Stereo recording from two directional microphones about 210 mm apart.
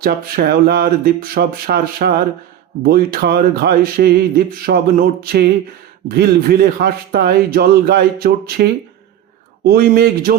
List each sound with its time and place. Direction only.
0.0 s speech: 45° right (ahead or behind)
9.6 s speech: 45° right (ahead or behind)